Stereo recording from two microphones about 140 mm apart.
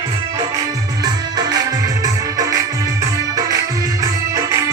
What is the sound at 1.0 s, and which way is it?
Music, 30° right (ahead or behind).